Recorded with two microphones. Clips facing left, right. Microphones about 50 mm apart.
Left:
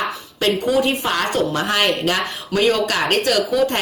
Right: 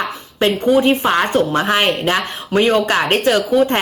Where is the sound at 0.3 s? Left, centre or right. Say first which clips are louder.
Right 4 dB; right.